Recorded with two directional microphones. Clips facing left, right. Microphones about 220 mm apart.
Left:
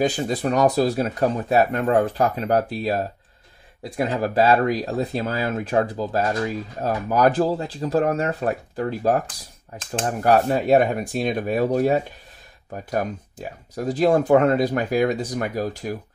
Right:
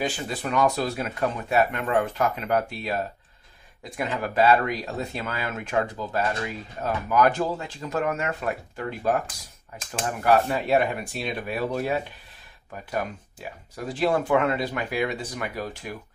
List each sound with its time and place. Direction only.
0.0 s speech: 40° left (ahead or behind)